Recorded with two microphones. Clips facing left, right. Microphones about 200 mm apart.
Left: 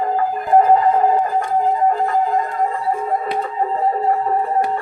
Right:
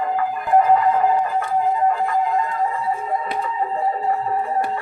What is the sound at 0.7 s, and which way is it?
Music, 35° left (ahead or behind).